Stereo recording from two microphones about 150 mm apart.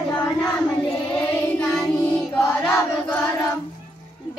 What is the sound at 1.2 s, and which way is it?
Music, 10° left (ahead or behind).